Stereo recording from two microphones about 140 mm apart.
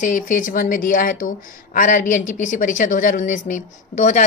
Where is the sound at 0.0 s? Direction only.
75° left (ahead or behind).